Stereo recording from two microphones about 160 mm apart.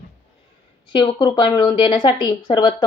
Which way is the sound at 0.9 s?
30° left (ahead or behind).